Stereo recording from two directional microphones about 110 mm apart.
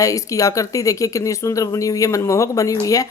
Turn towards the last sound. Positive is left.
turn(degrees=30)  # may be behind; listen again after turning